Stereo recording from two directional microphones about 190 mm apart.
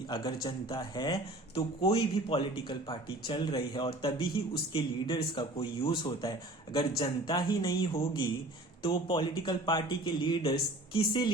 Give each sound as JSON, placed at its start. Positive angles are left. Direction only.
{"t": 0.4, "sound": "speech", "side_deg": 25}